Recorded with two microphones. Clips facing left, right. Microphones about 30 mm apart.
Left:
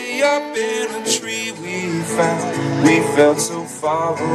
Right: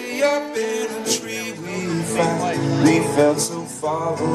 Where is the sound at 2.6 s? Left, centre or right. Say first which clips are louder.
Left 3 dB; left.